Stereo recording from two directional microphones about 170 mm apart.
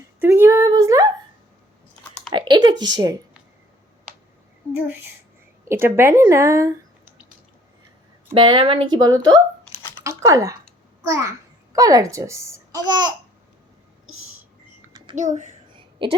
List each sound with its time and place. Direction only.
0.2 s a sound: 15° right (ahead or behind)
2.3 s a sound: 25° right (ahead or behind)
2.8 s speech: 25° right (ahead or behind)
4.7 s a child's voice: 10° right (ahead or behind)
8.3 s a child's voice: 30° right (ahead or behind)
15.1 s a child's voice: 45° right (ahead or behind)